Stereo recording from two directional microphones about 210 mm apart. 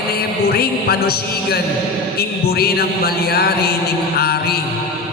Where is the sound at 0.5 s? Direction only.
50° left (ahead or behind).